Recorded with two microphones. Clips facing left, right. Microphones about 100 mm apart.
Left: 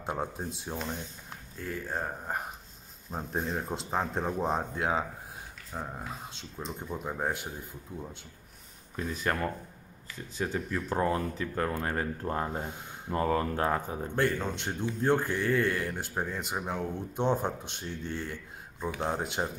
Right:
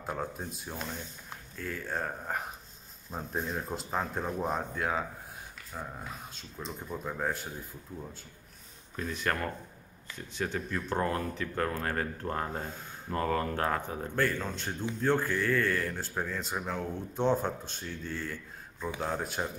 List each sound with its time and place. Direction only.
0.0 s speech: 25° left (ahead or behind)
8.9 s speech: 10° left (ahead or behind)